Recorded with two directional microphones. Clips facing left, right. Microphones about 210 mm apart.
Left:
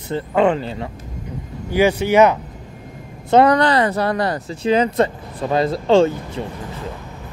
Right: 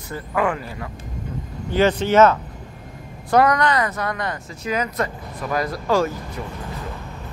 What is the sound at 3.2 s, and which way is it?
Speech, 30° left (ahead or behind).